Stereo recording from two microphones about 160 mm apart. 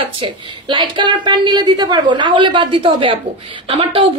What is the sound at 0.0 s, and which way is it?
A woman's voice, 30° right (ahead or behind).